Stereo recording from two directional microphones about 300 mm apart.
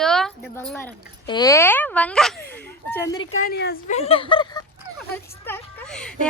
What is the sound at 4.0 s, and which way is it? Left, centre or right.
Speech, centre.